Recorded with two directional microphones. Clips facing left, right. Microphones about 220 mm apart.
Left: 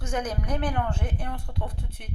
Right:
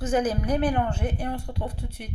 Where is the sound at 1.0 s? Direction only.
35° right (ahead or behind).